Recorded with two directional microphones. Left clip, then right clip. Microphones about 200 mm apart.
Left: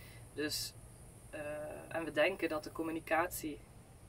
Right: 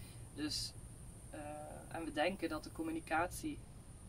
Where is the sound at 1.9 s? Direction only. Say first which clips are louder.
Left 5 dB; 15° right (ahead or behind).